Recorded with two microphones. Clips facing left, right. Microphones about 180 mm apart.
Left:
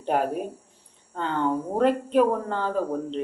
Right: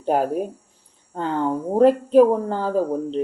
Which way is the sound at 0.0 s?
35° right (ahead or behind).